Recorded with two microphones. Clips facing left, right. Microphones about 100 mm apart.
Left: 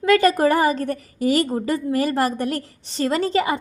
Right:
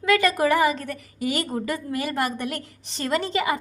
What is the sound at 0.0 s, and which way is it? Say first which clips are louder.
A woman's voice: left 4 dB; 35° left (ahead or behind).